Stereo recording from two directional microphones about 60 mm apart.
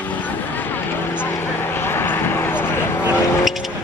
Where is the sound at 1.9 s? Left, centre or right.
Left.